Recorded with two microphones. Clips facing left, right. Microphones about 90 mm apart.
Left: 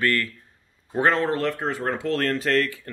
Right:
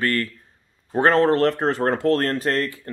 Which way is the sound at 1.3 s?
60° right (ahead or behind).